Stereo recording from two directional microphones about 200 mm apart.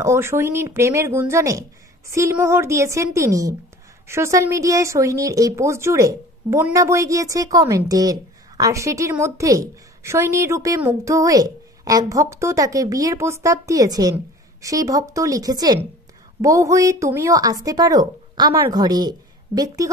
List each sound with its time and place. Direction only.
0.0 s speech: 15° right (ahead or behind)